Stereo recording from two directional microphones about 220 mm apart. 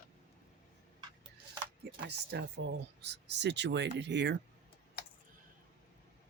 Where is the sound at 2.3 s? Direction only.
50° right (ahead or behind).